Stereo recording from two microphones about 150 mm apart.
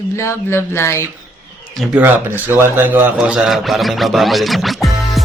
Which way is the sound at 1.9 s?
15° right (ahead or behind).